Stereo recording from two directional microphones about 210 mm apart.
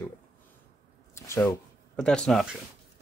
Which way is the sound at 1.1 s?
15° left (ahead or behind).